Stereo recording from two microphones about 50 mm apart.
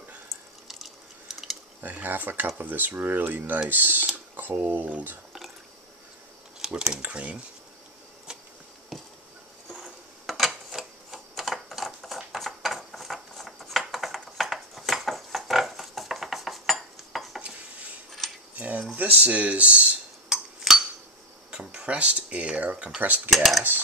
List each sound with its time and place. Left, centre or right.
0.7 s a sound: centre
1.8 s speech: right
6.6 s speech: centre
7.0 s speech: right
8.9 s chop: centre
9.8 s typewriter: centre
14.3 s a sound: centre
18.2 s cutlery: centre
18.6 s a sound: right
18.9 s speech: right
20.2 s chink: centre
21.5 s speech: centre; by 23.3 s right
23.3 s cutlery: centre